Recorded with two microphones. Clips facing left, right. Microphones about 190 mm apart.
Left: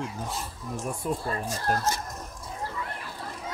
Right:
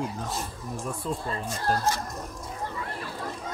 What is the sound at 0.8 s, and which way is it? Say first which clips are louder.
Speech: left 2 dB; 15° left (ahead or behind).